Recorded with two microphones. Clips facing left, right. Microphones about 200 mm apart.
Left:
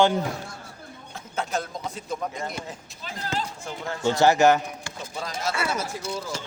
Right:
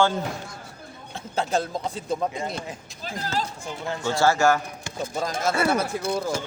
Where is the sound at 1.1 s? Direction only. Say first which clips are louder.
Right 4 dB; 30° right (ahead or behind).